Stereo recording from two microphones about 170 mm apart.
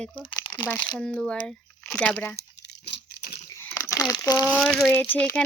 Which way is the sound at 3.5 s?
15° left (ahead or behind).